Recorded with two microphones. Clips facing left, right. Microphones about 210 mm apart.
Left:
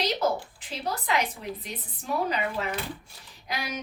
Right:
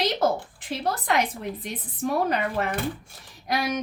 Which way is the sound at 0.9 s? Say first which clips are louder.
Right 3 dB; 50° right (ahead or behind).